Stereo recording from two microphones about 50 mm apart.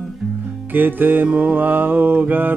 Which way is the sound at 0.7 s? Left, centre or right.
Right.